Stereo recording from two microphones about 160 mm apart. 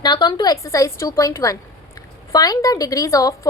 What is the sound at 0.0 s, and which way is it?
A woman's voice, 25° left (ahead or behind).